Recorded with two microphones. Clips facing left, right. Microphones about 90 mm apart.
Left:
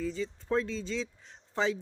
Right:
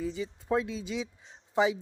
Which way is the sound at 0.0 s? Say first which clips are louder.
Even; 15° right (ahead or behind).